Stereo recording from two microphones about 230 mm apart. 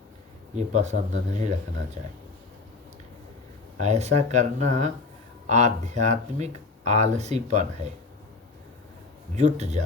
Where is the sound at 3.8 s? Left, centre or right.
Right.